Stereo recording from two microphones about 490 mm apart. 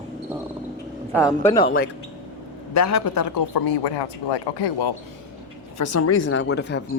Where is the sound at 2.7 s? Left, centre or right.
Left.